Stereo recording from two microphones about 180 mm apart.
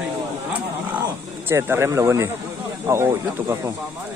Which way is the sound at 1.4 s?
15° right (ahead or behind).